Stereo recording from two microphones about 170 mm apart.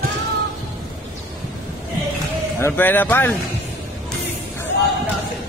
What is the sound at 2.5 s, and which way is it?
Speech, 15° left (ahead or behind).